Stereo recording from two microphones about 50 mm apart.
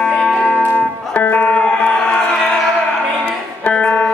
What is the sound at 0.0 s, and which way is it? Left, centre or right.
Music, centre.